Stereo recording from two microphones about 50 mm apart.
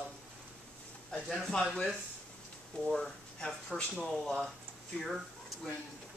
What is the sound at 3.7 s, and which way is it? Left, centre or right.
Speech, centre.